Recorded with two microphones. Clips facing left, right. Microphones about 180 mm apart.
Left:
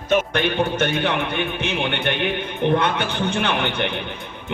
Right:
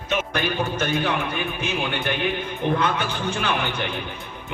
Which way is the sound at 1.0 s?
65° left (ahead or behind).